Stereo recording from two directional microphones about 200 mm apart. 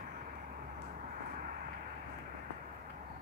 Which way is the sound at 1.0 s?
40° right (ahead or behind).